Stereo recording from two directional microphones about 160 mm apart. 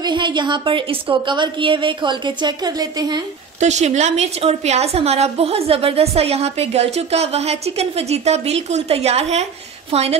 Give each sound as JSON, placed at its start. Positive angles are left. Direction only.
{"t": 0.0, "sound": "a woman's voice", "side_deg": -30}
{"t": 3.5, "sound": "a woman's voice", "side_deg": -45}